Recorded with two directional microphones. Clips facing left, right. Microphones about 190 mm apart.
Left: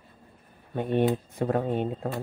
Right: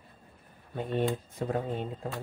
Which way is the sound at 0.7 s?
60° left (ahead or behind).